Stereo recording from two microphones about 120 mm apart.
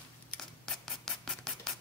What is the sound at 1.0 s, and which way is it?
Scratch, 5° left (ahead or behind).